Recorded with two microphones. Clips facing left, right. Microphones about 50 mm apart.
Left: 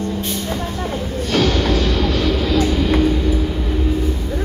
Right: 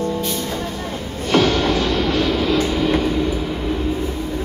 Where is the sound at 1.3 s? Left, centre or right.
Right.